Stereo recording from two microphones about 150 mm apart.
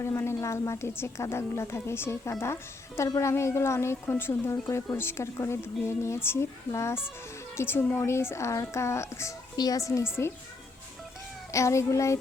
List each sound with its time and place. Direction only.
0.0 s a woman's voice: 15° left (ahead or behind)
11.5 s a child's voice: 20° left (ahead or behind)